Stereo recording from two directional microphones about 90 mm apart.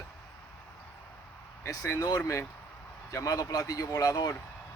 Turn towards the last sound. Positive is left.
turn(degrees=40)  # may be behind; listen again after turning